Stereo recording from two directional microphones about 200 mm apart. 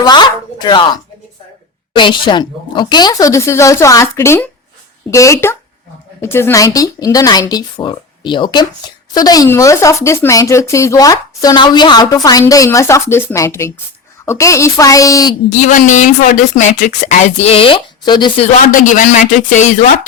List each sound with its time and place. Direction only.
0.0 s speech: 20° left (ahead or behind)
2.0 s speech: 25° left (ahead or behind)
15.5 s speech: 40° left (ahead or behind); by 18.4 s 20° left (ahead or behind)
18.5 s speech: 40° left (ahead or behind)